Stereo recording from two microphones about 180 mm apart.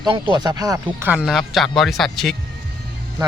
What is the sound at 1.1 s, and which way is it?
Speech, 5° right (ahead or behind).